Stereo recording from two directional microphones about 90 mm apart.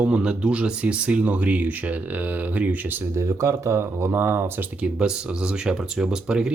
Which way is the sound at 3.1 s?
30° right (ahead or behind).